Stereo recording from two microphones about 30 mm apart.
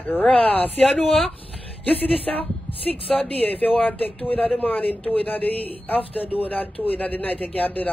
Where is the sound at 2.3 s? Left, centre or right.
Centre.